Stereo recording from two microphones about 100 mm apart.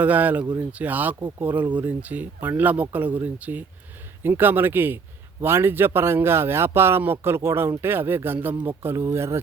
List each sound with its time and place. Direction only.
0.0 s a man's voice: 15° right (ahead or behind)